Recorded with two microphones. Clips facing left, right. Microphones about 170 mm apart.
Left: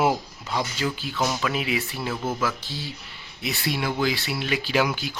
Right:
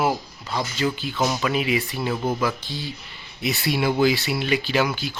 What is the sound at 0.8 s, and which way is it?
Speech, centre (ahead or behind).